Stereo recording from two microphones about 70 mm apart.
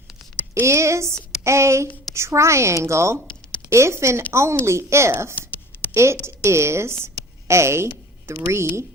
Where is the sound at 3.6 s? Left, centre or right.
Right.